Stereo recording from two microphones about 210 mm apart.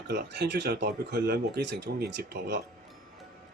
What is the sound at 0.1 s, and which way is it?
Speech, 55° right (ahead or behind).